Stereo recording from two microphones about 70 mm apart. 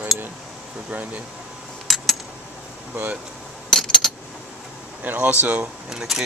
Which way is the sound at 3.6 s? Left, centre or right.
Centre.